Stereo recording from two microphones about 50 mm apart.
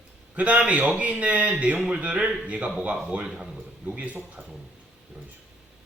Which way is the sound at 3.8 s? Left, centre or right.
Right.